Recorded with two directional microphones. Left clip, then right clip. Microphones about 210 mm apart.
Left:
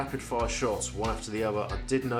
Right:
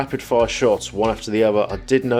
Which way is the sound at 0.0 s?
35° right (ahead or behind).